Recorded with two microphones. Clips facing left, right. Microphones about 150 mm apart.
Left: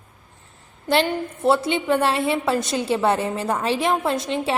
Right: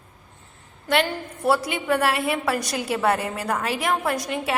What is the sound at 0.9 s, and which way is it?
A woman's voice, 25° left (ahead or behind).